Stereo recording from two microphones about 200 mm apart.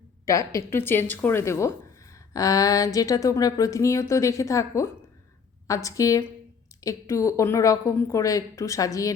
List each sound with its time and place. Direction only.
0.3 s speech: 15° left (ahead or behind)